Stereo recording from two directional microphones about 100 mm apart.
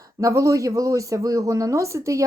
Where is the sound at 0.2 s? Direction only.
35° right (ahead or behind).